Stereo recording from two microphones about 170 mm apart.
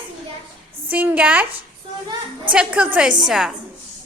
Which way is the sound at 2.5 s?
5° right (ahead or behind).